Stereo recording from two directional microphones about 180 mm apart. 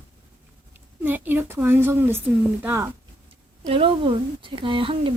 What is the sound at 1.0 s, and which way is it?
A woman's voice, 10° right (ahead or behind).